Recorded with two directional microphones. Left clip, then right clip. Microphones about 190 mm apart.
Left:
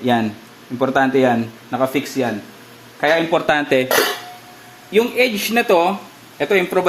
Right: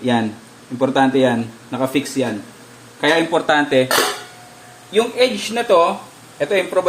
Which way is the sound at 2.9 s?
25° left (ahead or behind).